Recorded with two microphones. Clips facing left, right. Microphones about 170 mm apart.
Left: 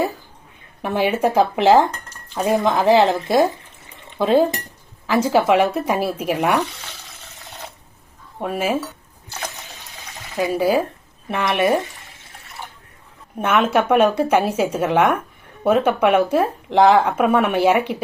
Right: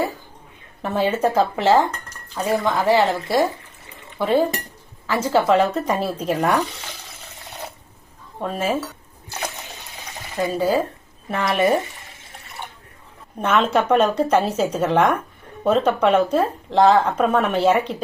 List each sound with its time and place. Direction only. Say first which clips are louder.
0.8 s speech: left 1 dB; 10° left (ahead or behind)
4.1 s dishes: left 3 dB; 20° left (ahead or behind)
5.0 s speech: left 2 dB; 15° left (ahead or behind)
8.4 s speech: left 1 dB; 10° left (ahead or behind)
10.4 s speech: left 2 dB; 10° left (ahead or behind)
13.4 s speech: left 1 dB; 10° left (ahead or behind)